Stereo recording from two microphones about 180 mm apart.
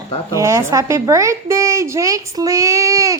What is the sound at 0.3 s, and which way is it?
A woman's voice, 15° right (ahead or behind).